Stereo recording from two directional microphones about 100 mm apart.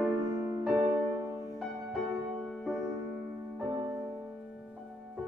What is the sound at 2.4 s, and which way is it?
Music, centre (ahead or behind).